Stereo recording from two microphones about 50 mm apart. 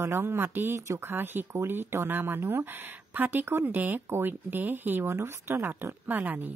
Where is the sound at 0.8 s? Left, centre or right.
Right.